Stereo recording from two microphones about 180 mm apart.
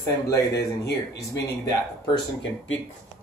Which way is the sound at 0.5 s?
65° left (ahead or behind).